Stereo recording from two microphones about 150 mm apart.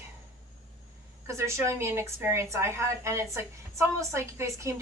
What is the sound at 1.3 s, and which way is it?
A woman's voice, 20° right (ahead or behind).